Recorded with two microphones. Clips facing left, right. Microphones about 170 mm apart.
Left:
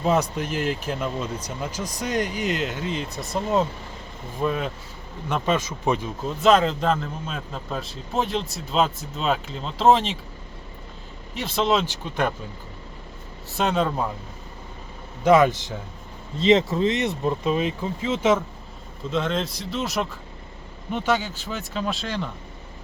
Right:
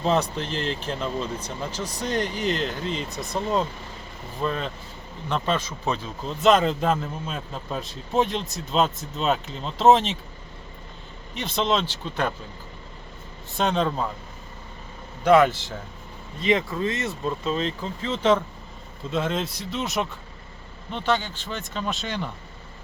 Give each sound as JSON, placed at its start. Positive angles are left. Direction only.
{"t": 0.0, "sound": "speech", "side_deg": 10}
{"t": 6.4, "sound": "a man's voice", "side_deg": 0}
{"t": 11.3, "sound": "speech", "side_deg": 5}
{"t": 13.6, "sound": "a man's voice", "side_deg": 5}
{"t": 16.4, "sound": "speech", "side_deg": 25}
{"t": 19.1, "sound": "a man's voice", "side_deg": -5}